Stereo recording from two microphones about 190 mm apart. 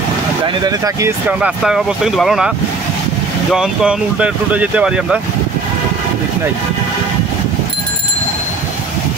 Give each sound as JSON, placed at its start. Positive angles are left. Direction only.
{"t": 0.7, "sound": "speech", "side_deg": -20}
{"t": 1.4, "sound": "speech", "side_deg": 0}
{"t": 3.5, "sound": "speech", "side_deg": -5}